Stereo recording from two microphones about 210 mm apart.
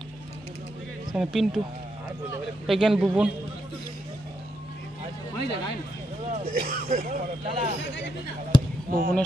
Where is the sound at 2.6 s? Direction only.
Centre (ahead or behind).